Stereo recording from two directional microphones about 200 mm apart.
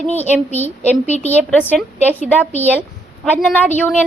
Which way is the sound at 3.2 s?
5° left (ahead or behind).